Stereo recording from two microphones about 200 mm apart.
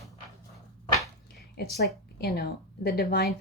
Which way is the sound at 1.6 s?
55° left (ahead or behind).